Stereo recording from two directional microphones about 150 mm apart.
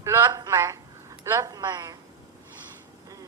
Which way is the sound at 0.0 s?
15° right (ahead or behind).